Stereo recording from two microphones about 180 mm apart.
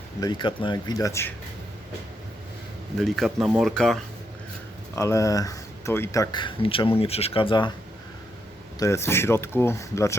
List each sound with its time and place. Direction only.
0.2 s speech: 25° left (ahead or behind)
3.0 s speech: centre (ahead or behind)
4.9 s speech: 15° left (ahead or behind)
8.8 s speech: 15° left (ahead or behind)